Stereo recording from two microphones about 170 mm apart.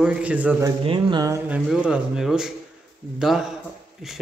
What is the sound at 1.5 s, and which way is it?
A man's voice, 5° right (ahead or behind).